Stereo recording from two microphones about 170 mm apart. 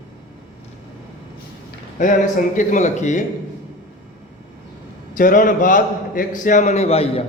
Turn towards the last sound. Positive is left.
turn(degrees=35)  # may be behind; listen again after turning